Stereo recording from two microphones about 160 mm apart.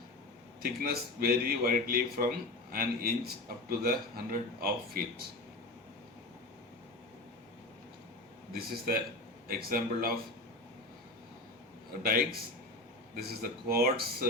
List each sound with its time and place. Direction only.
0.6 s a man's voice: 65° right (ahead or behind)
8.5 s a man's voice: 70° right (ahead or behind)
12.0 s a man's voice: 65° right (ahead or behind)